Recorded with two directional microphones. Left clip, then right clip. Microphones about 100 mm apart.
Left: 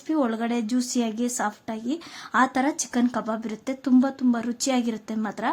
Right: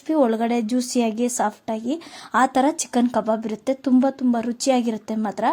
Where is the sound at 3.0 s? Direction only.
35° right (ahead or behind).